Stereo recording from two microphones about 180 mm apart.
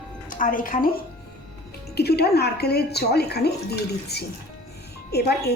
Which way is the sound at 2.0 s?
65° left (ahead or behind).